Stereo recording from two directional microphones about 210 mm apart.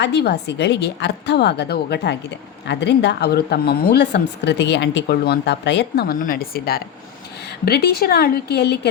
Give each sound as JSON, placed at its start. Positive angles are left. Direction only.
{"t": 0.0, "sound": "speech", "side_deg": 55}